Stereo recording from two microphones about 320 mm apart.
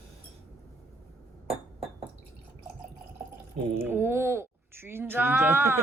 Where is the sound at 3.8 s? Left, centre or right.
Centre.